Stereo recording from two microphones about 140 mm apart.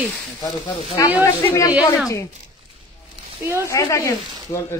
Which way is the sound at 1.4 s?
20° left (ahead or behind).